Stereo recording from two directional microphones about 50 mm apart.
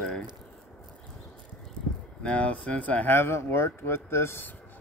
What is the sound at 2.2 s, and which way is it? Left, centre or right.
Speech, left.